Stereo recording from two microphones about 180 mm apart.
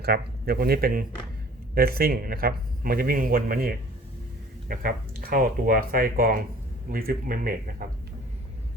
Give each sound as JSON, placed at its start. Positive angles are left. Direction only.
{"t": 0.0, "sound": "speech", "side_deg": -60}